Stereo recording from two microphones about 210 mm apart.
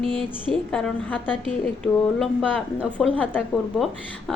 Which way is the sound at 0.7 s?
5° left (ahead or behind).